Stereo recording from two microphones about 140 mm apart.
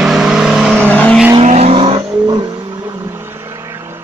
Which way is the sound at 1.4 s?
50° right (ahead or behind).